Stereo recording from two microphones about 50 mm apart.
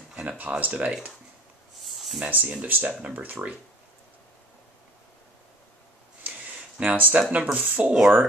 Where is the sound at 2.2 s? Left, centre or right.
Right.